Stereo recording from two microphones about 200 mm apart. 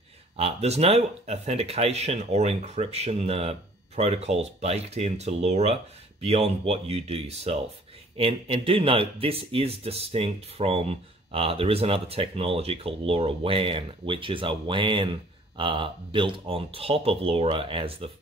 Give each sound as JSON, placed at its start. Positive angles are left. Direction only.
{"t": 0.4, "sound": "speech", "side_deg": -30}